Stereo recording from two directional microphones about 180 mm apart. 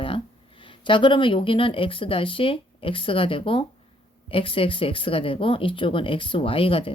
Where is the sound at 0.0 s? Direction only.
30° left (ahead or behind).